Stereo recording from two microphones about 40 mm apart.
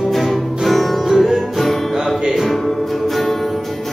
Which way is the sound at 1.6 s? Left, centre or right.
Centre.